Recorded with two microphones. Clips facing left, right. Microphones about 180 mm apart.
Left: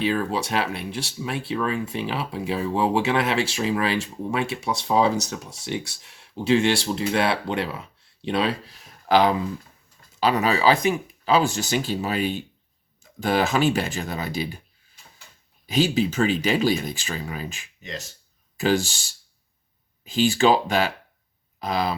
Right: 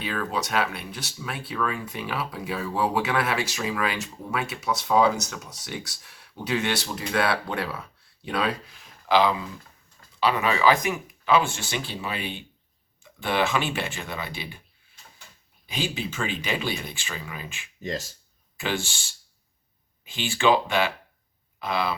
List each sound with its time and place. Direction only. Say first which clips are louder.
0.0 s speech: left 5 dB; 30° left (ahead or behind)
15.6 s speech: left 9 dB; 40° left (ahead or behind)